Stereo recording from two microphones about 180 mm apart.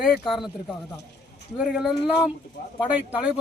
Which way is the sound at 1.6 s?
5° right (ahead or behind).